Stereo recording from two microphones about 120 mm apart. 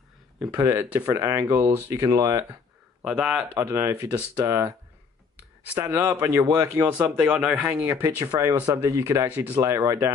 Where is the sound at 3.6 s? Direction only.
20° right (ahead or behind).